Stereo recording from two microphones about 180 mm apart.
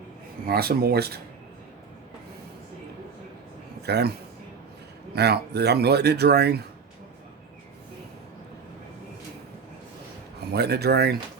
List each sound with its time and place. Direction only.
0.4 s speech: 60° right (ahead or behind)
3.8 s speech: 65° right (ahead or behind)
5.1 s speech: 65° right (ahead or behind)
10.5 s speech: 65° right (ahead or behind)